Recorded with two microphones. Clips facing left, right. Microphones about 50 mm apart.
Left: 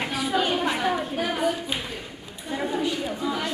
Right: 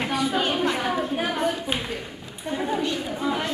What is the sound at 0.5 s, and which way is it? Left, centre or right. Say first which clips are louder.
Chatter: even; centre.